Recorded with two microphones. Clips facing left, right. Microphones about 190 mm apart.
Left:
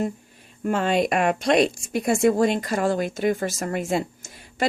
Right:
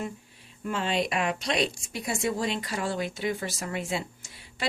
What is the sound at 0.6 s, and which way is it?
Speech, 50° left (ahead or behind).